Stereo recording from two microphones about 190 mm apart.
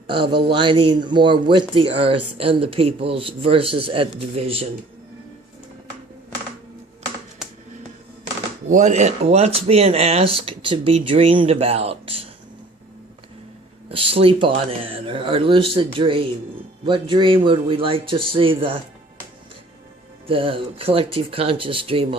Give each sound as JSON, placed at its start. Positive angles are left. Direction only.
{"t": 0.1, "sound": "speech", "side_deg": -25}
{"t": 7.4, "sound": "finger snapping", "side_deg": -5}
{"t": 8.6, "sound": "speech", "side_deg": -40}
{"t": 13.9, "sound": "speech", "side_deg": -30}
{"t": 20.2, "sound": "speech", "side_deg": -30}